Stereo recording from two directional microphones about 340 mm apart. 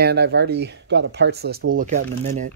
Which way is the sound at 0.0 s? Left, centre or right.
Right.